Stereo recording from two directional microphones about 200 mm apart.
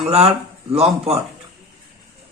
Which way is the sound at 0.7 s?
30° right (ahead or behind).